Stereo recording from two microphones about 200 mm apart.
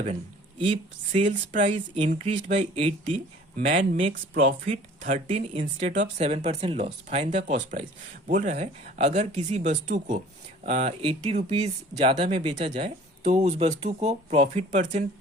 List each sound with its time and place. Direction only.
0.6 s speech: 30° right (ahead or behind)
4.1 s speech: 70° right (ahead or behind)
4.6 s speech: 35° right (ahead or behind)